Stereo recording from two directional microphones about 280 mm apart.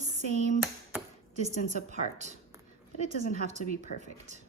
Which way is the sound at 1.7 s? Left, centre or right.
Right.